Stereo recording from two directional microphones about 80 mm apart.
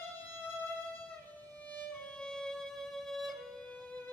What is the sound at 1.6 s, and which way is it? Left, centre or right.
Music, centre.